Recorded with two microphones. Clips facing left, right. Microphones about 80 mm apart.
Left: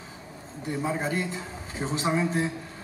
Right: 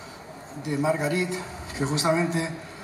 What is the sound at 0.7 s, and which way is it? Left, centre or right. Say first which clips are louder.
A man's voice: right 4 dB; right.